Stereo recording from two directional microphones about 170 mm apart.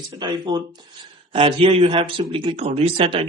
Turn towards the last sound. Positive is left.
turn(degrees=-35)  # may be behind; listen again after turning